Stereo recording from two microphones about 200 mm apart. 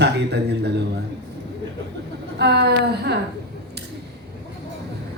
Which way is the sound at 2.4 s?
55° right (ahead or behind).